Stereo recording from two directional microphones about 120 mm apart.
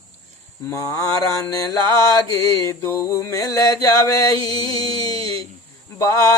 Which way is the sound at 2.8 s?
25° left (ahead or behind).